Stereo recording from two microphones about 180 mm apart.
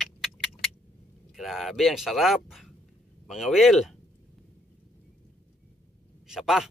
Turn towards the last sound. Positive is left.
turn(degrees=0)  # may be behind; listen again after turning